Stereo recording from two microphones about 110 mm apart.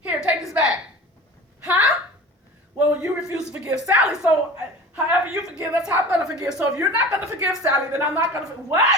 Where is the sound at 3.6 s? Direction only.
15° right (ahead or behind).